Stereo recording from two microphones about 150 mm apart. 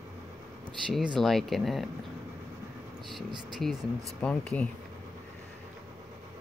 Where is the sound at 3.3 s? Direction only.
30° right (ahead or behind).